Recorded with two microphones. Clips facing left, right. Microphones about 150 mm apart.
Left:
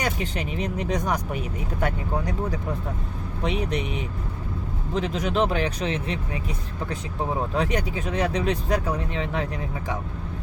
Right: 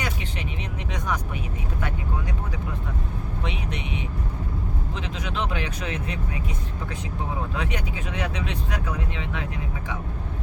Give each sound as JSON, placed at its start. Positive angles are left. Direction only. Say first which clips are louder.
{"t": 0.0, "sound": "speech", "louder": "left 4 dB", "side_deg": 40}
{"t": 4.9, "sound": "speech", "louder": "left 9 dB", "side_deg": 40}
{"t": 7.5, "sound": "speech", "louder": "left 5 dB", "side_deg": 35}